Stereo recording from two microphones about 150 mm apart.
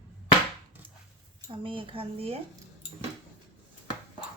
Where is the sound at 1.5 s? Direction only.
35° right (ahead or behind).